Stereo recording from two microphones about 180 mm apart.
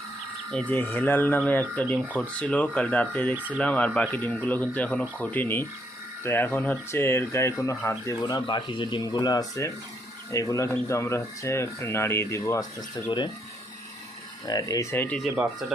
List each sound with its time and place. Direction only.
0.7 s speech: 10° left (ahead or behind)
3.3 s speech: 10° right (ahead or behind)
3.6 s speech: 5° left (ahead or behind); by 13.3 s 25° left (ahead or behind)
14.4 s speech: 20° left (ahead or behind)